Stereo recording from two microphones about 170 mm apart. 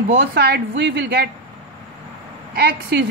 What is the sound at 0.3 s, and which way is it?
A woman's voice, 75° right (ahead or behind).